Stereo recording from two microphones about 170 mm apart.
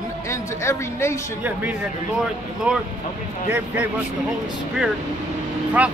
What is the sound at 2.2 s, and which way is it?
Speech, 5° right (ahead or behind).